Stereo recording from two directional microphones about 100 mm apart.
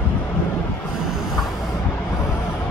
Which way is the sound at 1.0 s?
5° right (ahead or behind).